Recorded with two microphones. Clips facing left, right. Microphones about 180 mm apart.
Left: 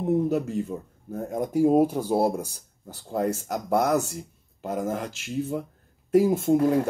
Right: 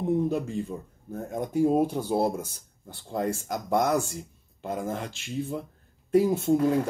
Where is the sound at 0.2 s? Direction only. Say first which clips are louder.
Left 2 dB; 5° left (ahead or behind).